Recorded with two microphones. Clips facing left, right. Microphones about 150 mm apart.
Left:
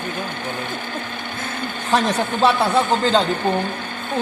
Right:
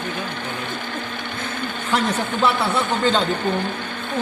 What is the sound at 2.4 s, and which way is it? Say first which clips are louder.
Speech: left 4 dB; 35° left (ahead or behind).